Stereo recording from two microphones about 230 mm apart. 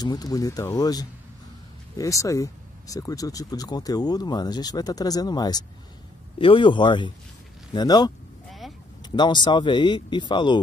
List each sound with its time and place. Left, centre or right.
0.0 s speech: centre
8.5 s vehicle: centre
9.0 s speech: centre